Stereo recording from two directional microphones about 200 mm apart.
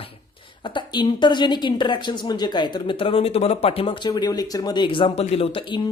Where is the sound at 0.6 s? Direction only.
25° left (ahead or behind).